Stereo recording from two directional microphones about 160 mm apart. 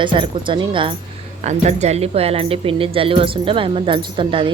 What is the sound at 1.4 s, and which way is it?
A woman's voice, 45° right (ahead or behind).